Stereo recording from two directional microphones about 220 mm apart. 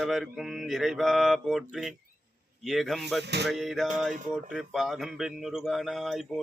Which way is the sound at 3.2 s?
50° right (ahead or behind).